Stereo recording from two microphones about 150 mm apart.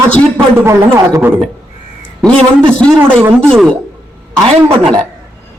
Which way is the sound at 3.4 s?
5° left (ahead or behind).